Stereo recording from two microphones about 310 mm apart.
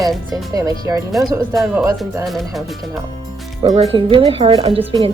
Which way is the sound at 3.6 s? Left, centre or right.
Centre.